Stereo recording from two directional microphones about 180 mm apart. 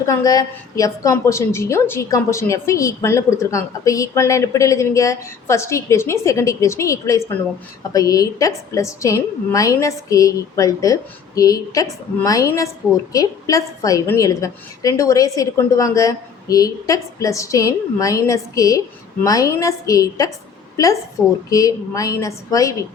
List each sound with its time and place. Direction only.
0.0 s a woman's voice: 20° left (ahead or behind)
21.5 s a woman's voice: 20° left (ahead or behind)